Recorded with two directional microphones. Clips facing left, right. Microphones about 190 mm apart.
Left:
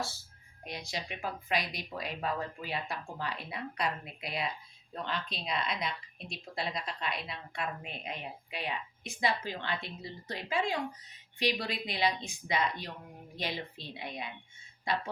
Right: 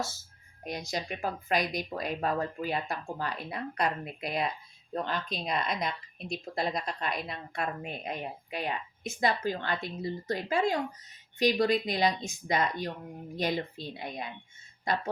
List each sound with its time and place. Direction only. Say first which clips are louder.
0.6 s speech: right 5 dB; 45° right (ahead or behind)